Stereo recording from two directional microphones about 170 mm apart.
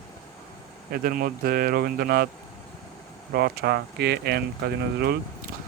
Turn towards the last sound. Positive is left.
turn(degrees=-70)  # may be behind; listen again after turning